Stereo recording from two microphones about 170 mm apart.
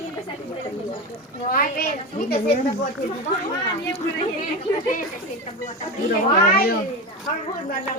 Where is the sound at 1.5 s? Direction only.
60° left (ahead or behind).